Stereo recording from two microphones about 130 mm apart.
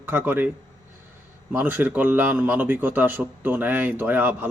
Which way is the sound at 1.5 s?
15° right (ahead or behind).